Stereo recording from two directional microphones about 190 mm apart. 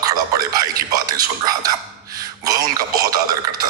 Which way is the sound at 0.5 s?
20° right (ahead or behind).